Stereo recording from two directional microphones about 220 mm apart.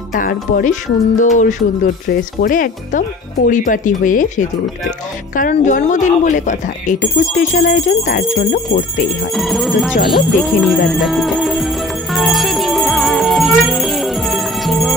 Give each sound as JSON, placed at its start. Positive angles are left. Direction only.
{"t": 0.1, "sound": "speech", "side_deg": 40}
{"t": 9.3, "sound": "music", "side_deg": 0}